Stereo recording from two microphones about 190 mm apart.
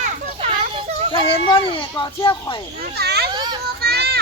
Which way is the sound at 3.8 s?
55° right (ahead or behind).